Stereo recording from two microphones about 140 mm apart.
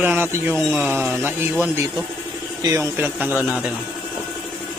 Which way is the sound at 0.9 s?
15° right (ahead or behind).